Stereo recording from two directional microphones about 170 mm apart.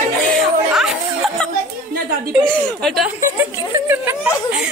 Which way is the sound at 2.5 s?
Centre (ahead or behind).